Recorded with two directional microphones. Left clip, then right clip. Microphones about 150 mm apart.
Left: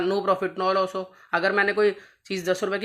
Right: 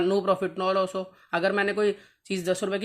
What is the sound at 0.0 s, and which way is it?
Speech, 35° right (ahead or behind).